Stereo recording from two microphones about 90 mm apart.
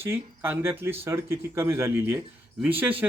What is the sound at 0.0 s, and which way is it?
Speech, 25° right (ahead or behind).